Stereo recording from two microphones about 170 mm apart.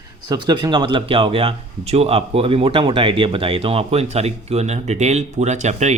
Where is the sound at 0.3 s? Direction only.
25° right (ahead or behind).